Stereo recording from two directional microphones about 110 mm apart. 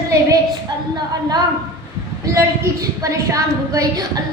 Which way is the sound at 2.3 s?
30° right (ahead or behind).